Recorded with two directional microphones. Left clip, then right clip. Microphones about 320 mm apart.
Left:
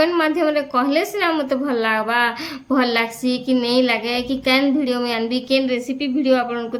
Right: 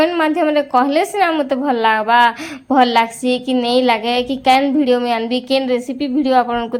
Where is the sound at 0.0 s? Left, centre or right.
Centre.